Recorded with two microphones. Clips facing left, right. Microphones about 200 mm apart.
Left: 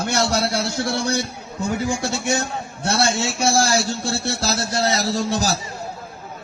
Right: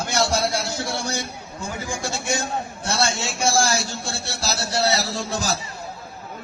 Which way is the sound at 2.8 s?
60° left (ahead or behind).